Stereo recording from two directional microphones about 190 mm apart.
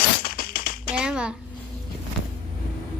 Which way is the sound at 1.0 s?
5° right (ahead or behind).